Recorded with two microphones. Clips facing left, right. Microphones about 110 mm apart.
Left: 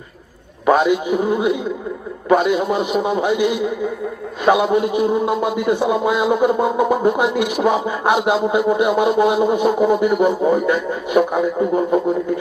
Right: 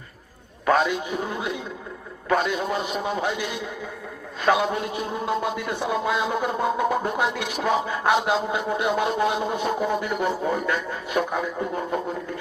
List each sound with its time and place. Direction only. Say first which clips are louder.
0.6 s a man's voice: left 6 dB; 15° left (ahead or behind)